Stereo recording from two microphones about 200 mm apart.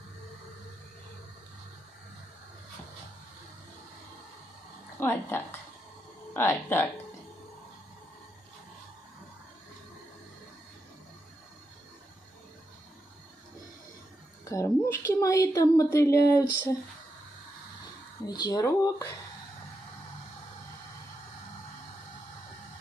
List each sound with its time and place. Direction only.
5.0 s speech: 10° left (ahead or behind)
14.4 s speech: 15° left (ahead or behind)
18.2 s speech: 20° left (ahead or behind)